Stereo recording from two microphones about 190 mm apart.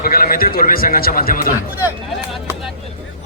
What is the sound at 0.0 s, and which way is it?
A man's voice, 50° left (ahead or behind).